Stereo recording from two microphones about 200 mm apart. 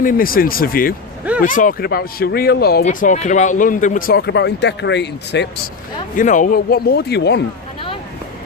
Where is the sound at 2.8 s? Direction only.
40° left (ahead or behind); by 5.7 s 60° left (ahead or behind).